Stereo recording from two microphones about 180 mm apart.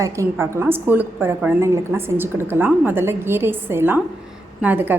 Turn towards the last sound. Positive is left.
turn(degrees=-10)  # may be behind; listen again after turning